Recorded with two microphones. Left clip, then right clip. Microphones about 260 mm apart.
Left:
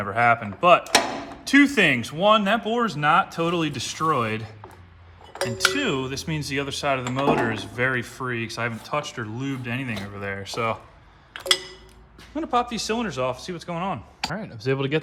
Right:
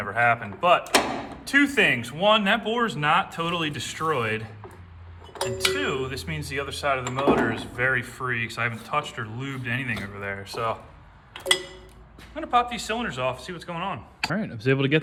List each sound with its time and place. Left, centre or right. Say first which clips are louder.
0.0 s speech: left 2 dB; left
5.5 s speech: left 2 dB; left
10.4 s speech: left 2 dB; left
12.3 s speech: right 1 dB; centre